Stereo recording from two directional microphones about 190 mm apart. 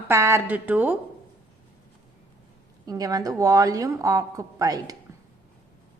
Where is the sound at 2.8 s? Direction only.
20° right (ahead or behind).